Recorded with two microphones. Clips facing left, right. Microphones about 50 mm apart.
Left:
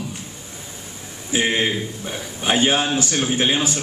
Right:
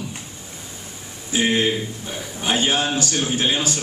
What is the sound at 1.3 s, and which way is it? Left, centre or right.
A man's voice, left.